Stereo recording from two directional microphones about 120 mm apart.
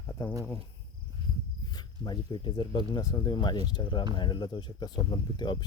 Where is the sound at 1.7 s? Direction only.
40° left (ahead or behind).